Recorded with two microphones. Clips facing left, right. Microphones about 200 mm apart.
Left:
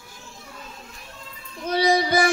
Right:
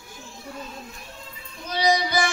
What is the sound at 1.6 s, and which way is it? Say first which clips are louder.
Child singing: left 3 dB; 55° left (ahead or behind).